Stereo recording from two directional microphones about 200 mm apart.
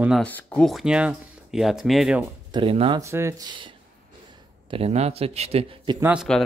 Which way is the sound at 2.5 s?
25° right (ahead or behind).